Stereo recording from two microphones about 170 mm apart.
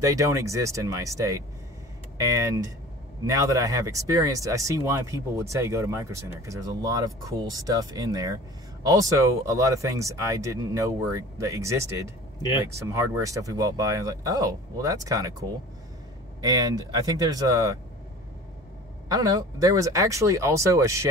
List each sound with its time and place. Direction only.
0.0 s speech: 20° right (ahead or behind)
16.3 s speech: 20° right (ahead or behind)
19.0 s speech: 20° right (ahead or behind)